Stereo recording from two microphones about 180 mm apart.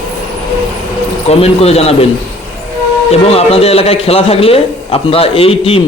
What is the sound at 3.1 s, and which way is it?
A man's voice, 35° left (ahead or behind).